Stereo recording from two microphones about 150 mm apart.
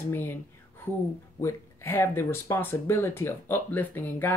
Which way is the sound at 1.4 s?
15° left (ahead or behind).